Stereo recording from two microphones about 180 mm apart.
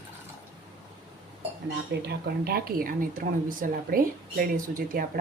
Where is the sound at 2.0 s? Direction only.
65° right (ahead or behind).